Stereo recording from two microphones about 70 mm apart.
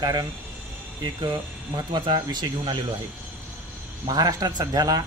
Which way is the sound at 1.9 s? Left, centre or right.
Right.